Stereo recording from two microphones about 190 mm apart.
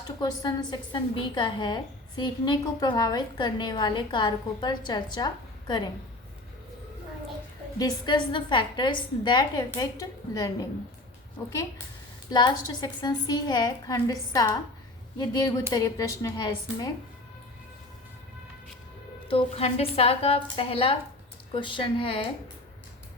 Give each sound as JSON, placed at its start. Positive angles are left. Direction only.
{"t": 0.2, "sound": "a woman's voice", "side_deg": 20}
{"t": 7.8, "sound": "a woman's voice", "side_deg": 20}
{"t": 12.3, "sound": "a woman's voice", "side_deg": 20}
{"t": 19.3, "sound": "a woman's voice", "side_deg": 30}